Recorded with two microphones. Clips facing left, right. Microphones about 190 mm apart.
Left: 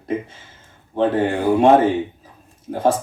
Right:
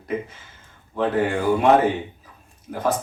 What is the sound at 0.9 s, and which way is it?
Speech, 30° left (ahead or behind).